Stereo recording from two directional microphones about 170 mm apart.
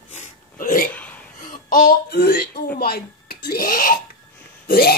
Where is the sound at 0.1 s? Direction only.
50° left (ahead or behind).